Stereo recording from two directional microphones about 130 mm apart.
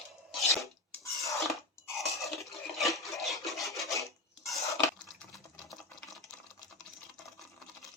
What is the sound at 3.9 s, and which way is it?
Dishes, 25° left (ahead or behind).